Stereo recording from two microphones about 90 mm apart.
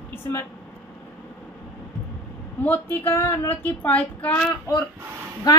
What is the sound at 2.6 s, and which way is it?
A woman's voice, 20° left (ahead or behind).